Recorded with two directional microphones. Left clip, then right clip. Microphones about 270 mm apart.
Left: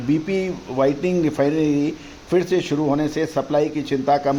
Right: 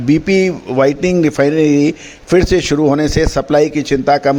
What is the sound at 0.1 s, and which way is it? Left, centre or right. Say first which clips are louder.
A man's voice: right 9 dB; right.